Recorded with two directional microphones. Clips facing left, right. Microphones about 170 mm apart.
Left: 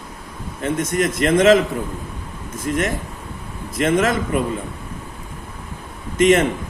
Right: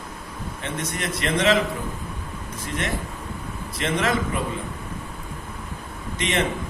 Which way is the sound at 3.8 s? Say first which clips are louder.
Left 7 dB; 50° left (ahead or behind).